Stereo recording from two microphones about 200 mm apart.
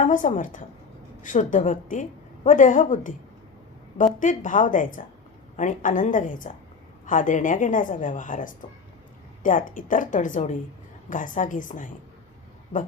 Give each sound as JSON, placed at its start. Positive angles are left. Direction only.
{"t": 0.0, "sound": "a woman's voice", "side_deg": 40}